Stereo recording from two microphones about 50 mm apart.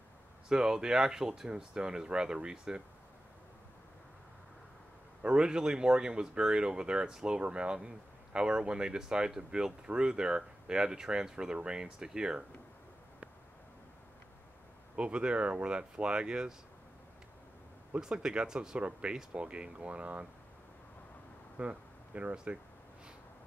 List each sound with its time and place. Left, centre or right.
0.5 s speech: centre
5.2 s speech: centre
15.0 s speech: right
17.9 s speech: centre
21.5 s speech: right